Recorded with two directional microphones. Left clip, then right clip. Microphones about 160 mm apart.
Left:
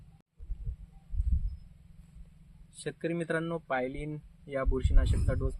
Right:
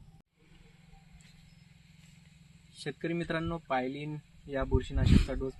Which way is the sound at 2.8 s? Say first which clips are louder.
Left 2 dB; 25° left (ahead or behind).